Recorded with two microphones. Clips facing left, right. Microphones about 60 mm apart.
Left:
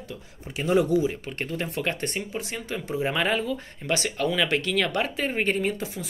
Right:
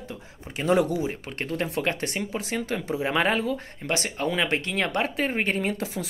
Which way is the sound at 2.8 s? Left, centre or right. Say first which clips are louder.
Even; right.